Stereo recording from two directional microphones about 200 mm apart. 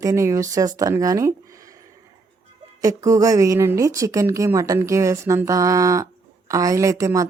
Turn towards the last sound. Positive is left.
turn(degrees=-15)  # may be behind; listen again after turning